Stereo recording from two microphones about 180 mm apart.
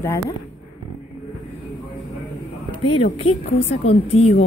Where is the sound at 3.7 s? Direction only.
35° left (ahead or behind).